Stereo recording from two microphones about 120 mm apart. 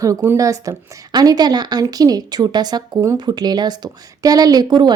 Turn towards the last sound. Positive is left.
turn(degrees=-35)  # may be behind; listen again after turning